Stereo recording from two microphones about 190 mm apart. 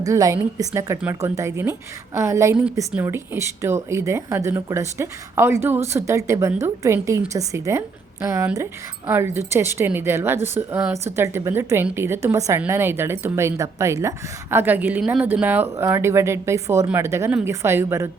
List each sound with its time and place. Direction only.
0.0 s speech: 15° right (ahead or behind)